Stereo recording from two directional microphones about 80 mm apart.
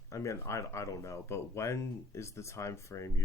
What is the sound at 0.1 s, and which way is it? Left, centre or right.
Speech, left.